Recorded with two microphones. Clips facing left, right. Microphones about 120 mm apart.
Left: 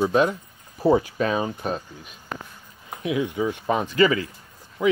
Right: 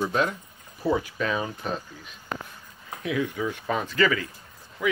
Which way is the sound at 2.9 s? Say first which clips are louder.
Left 3 dB; 20° left (ahead or behind).